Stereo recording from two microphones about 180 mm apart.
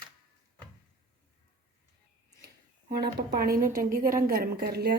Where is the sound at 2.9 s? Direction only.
60° right (ahead or behind).